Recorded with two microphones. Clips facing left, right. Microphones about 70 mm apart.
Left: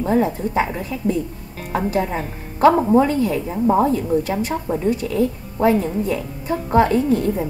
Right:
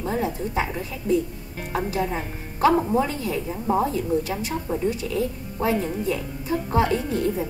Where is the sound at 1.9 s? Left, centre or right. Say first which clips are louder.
Left 5 dB; left.